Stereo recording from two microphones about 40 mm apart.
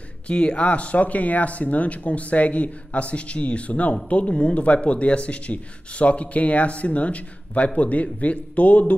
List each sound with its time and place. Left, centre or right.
0.3 s speech: left